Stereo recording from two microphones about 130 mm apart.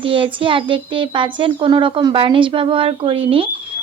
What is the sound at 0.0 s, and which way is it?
A woman's voice, 45° right (ahead or behind).